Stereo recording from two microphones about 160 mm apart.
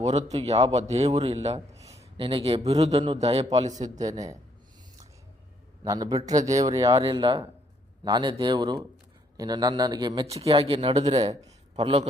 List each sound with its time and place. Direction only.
0.0 s a man's voice: 45° right (ahead or behind)
1.7 s a sound: 20° right (ahead or behind)
2.1 s a man's voice: 35° right (ahead or behind); by 3.9 s 50° right (ahead or behind)
3.9 s a man's voice: 20° right (ahead or behind)
5.8 s a man's voice: 20° right (ahead or behind)
7.0 s a man's voice: 30° right (ahead or behind)
10.2 s a man's voice: 40° right (ahead or behind)